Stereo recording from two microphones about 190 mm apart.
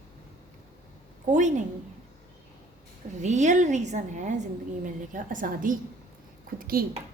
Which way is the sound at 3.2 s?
40° right (ahead or behind).